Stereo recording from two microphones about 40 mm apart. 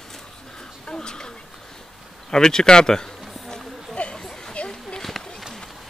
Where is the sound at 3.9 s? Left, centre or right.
Left.